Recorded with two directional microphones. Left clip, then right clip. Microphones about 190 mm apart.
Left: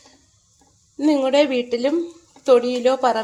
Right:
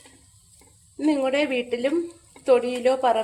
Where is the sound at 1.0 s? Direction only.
20° left (ahead or behind).